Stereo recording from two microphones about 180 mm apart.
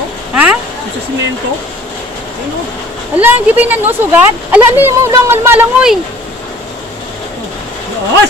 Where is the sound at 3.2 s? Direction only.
10° right (ahead or behind).